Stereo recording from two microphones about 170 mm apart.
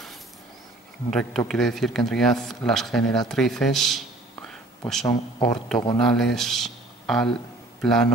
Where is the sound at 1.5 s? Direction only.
Centre (ahead or behind).